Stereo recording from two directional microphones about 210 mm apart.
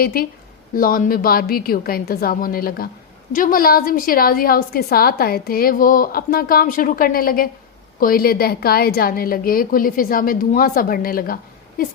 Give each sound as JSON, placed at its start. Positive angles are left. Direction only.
{"t": 0.0, "sound": "a woman's voice", "side_deg": 45}